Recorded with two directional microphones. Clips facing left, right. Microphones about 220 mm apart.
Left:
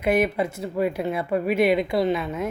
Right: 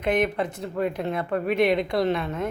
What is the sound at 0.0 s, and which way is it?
Speech, 10° left (ahead or behind).